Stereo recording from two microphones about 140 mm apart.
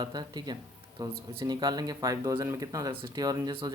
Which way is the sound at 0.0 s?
30° right (ahead or behind).